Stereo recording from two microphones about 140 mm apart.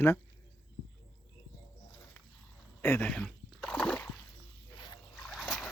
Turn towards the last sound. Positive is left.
turn(degrees=0)  # may be behind; listen again after turning